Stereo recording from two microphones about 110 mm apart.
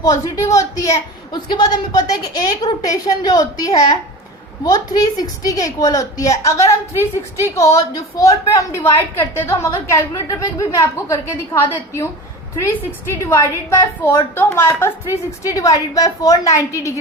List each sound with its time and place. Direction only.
0.0 s a woman's voice: 30° left (ahead or behind)
1.3 s a woman's voice: 45° left (ahead or behind); by 12.0 s 20° left (ahead or behind)
13.1 s a woman's voice: 25° left (ahead or behind)